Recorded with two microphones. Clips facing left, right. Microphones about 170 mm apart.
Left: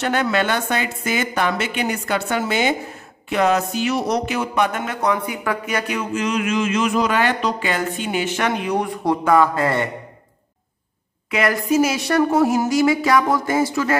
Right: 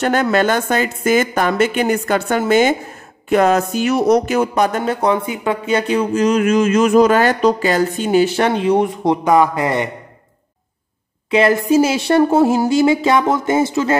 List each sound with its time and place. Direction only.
0.0 s speech: 45° right (ahead or behind); by 9.8 s 15° right (ahead or behind)
11.2 s speech: 25° right (ahead or behind)